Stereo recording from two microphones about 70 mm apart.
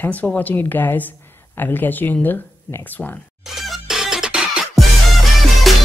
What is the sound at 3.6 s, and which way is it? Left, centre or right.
Music, centre.